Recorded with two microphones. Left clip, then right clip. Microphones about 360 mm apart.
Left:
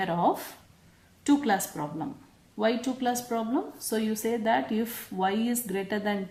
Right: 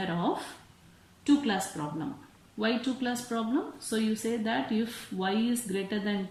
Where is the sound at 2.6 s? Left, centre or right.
Centre.